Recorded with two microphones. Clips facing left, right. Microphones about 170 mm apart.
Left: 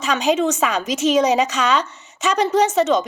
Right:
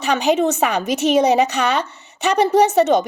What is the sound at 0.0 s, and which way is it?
A woman's voice, 65° right (ahead or behind).